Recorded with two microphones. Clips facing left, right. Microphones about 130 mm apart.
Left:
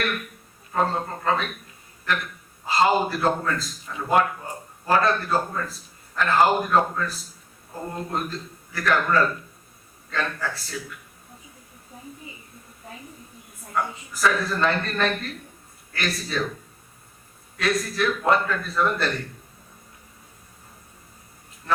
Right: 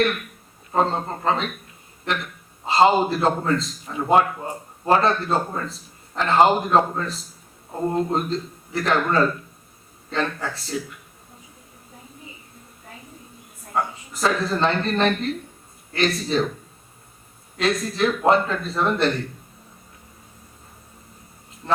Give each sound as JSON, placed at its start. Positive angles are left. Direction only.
{"t": 0.7, "sound": "a man's voice", "side_deg": -25}
{"t": 2.6, "sound": "a man's voice", "side_deg": -25}
{"t": 13.7, "sound": "a man's voice", "side_deg": -25}
{"t": 17.6, "sound": "a man's voice", "side_deg": -25}